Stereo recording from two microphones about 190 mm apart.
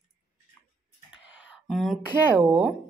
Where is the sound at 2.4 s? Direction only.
5° right (ahead or behind).